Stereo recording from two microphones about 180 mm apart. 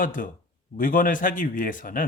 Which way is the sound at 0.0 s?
50° left (ahead or behind).